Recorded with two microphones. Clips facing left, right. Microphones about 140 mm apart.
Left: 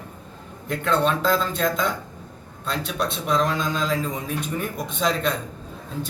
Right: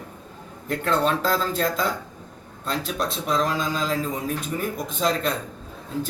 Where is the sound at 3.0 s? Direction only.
Centre (ahead or behind).